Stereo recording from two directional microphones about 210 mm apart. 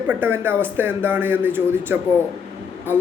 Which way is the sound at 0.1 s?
10° right (ahead or behind).